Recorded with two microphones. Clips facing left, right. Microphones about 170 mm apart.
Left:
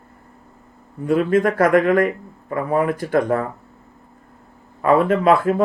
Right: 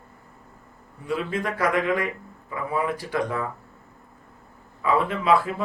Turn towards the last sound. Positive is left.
turn(degrees=50)  # may be behind; listen again after turning